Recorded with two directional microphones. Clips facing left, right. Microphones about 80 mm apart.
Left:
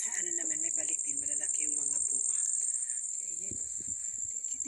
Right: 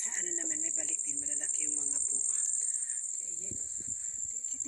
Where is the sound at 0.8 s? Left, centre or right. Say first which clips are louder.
Right 1 dB; right.